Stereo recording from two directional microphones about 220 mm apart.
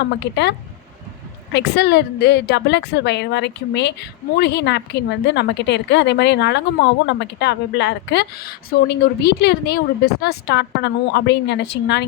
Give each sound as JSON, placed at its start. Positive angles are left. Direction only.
{"t": 0.0, "sound": "a woman's voice", "side_deg": 50}
{"t": 1.5, "sound": "a woman's voice", "side_deg": 50}